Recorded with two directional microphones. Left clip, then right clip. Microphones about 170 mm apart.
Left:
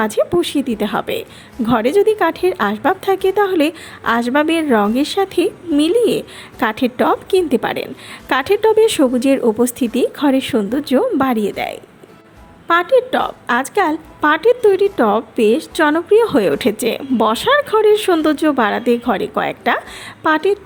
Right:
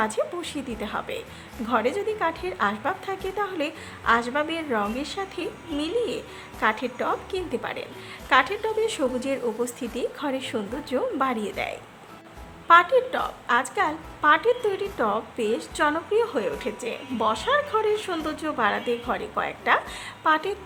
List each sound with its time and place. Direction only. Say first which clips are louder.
0.0 s a woman's voice: left 10 dB; 35° left (ahead or behind)